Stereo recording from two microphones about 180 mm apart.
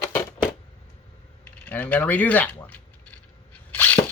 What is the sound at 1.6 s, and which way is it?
Speech, 10° left (ahead or behind).